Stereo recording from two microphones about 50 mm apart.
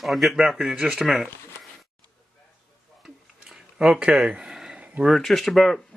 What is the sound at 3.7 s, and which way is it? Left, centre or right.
Speech, right.